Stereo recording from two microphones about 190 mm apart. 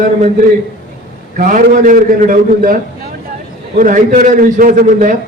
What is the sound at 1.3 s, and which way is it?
A man's voice, 45° right (ahead or behind).